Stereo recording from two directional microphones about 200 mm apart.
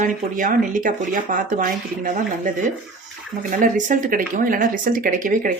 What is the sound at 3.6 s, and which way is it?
Speech, 40° right (ahead or behind).